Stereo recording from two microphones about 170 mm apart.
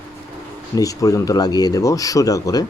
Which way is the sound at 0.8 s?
20° left (ahead or behind).